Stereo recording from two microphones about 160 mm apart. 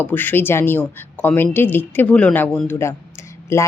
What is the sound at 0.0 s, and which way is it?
A woman's voice, 10° left (ahead or behind).